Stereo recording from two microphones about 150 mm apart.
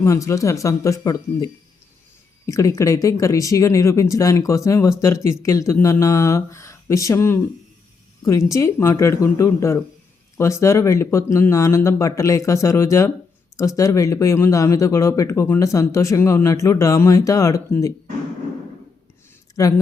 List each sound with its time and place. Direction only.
0.0 s speech: 20° left (ahead or behind)
2.5 s speech: 20° left (ahead or behind)
19.6 s speech: 20° left (ahead or behind)